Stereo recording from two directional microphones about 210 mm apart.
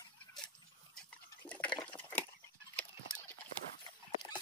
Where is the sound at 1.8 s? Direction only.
10° left (ahead or behind).